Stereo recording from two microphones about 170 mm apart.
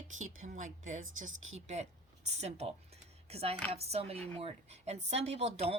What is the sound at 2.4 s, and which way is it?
A woman's voice, 40° right (ahead or behind).